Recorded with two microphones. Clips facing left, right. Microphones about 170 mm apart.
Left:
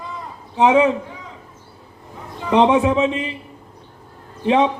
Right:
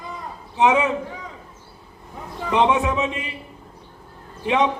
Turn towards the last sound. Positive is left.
turn(degrees=30)  # may be behind; listen again after turning